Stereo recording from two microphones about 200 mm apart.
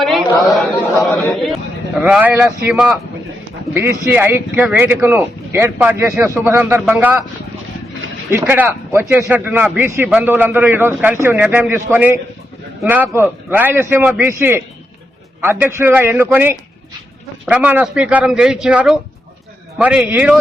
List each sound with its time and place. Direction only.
0.0 s chatter: centre (ahead or behind)
1.3 s a man's voice: centre (ahead or behind)
8.3 s a man's voice: 10° right (ahead or behind)